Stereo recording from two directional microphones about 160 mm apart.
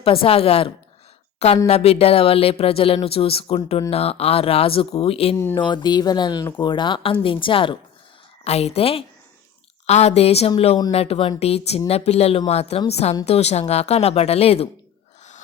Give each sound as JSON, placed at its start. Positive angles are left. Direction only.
{"t": 0.0, "sound": "speech", "side_deg": 35}